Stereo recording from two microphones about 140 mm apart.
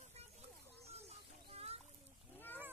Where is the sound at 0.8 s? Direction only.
50° right (ahead or behind).